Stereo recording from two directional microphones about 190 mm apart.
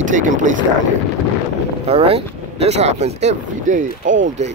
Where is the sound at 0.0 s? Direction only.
40° right (ahead or behind).